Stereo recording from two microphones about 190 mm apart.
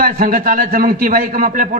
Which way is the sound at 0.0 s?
45° right (ahead or behind).